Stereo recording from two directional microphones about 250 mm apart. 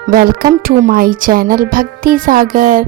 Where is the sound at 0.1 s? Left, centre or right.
Right.